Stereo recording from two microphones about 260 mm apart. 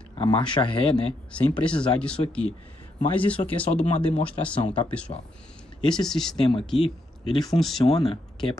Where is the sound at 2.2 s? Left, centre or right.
Centre.